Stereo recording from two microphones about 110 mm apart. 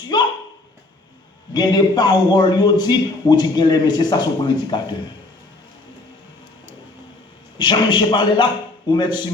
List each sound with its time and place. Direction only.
0.1 s speech: 40° left (ahead or behind)
1.5 s a man's voice: 40° left (ahead or behind)
7.6 s speech: 45° left (ahead or behind)